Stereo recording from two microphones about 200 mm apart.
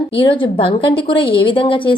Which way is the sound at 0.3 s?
25° left (ahead or behind).